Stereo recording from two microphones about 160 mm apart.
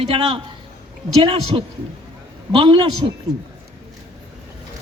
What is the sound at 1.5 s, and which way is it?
A man's voice, 30° right (ahead or behind).